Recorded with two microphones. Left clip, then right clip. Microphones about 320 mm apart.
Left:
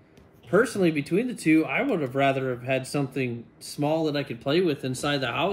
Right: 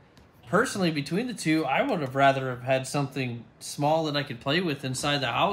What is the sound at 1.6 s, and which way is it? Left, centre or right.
Speech, right.